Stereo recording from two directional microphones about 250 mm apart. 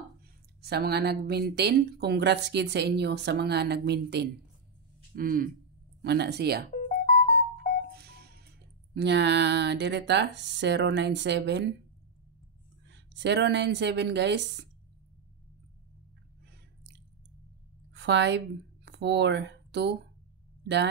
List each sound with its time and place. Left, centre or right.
0.6 s speech: right
7.0 s music: left
8.0 s speech: right
12.8 s speech: right
17.9 s a woman's voice: right